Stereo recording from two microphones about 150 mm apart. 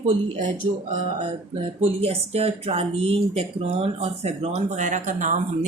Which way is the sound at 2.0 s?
40° right (ahead or behind).